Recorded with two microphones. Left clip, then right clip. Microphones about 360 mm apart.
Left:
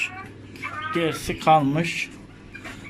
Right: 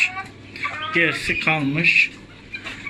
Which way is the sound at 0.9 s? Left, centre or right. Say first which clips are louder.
Right 7 dB; centre.